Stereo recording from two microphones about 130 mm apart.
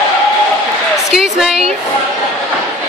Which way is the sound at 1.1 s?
5° right (ahead or behind).